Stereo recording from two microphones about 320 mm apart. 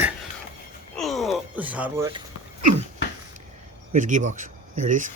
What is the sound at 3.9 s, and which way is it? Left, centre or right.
Speech, right.